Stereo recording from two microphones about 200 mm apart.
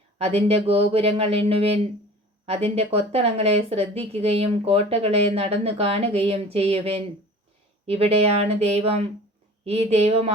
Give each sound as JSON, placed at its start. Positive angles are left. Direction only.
{"t": 0.2, "sound": "speech", "side_deg": -30}